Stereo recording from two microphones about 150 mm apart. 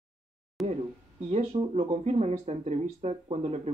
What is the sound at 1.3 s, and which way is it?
A man's voice, 45° right (ahead or behind).